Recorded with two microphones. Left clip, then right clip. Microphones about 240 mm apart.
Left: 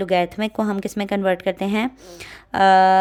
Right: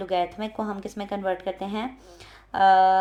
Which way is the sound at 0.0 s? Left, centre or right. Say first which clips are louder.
Left 6 dB; left.